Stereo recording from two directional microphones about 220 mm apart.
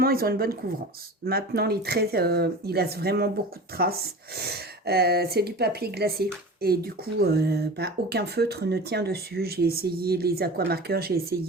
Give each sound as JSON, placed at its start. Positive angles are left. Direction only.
{"t": 0.0, "sound": "speech", "side_deg": -45}